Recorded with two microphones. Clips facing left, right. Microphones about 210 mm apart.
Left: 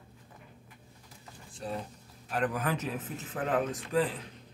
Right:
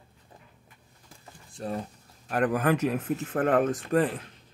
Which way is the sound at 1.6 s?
50° right (ahead or behind).